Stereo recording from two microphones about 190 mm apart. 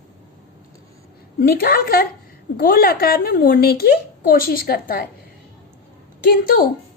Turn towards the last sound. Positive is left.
turn(degrees=50)  # may be behind; listen again after turning